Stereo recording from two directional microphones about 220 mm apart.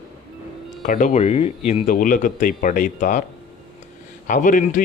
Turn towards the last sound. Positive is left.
turn(degrees=35)  # may be behind; listen again after turning